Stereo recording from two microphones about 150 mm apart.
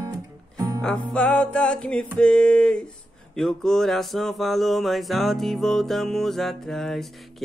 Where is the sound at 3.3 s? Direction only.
5° left (ahead or behind).